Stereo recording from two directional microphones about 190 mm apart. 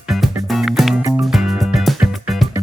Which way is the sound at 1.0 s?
15° right (ahead or behind).